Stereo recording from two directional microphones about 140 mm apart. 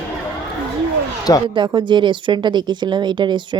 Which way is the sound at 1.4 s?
35° right (ahead or behind).